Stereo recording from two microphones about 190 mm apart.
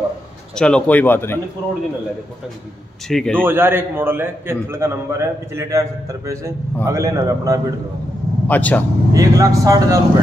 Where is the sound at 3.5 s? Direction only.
10° right (ahead or behind).